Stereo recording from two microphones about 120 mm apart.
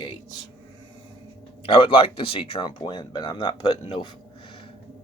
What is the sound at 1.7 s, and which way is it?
Speech, 45° left (ahead or behind).